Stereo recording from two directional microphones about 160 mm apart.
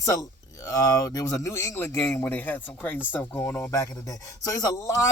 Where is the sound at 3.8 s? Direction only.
25° left (ahead or behind).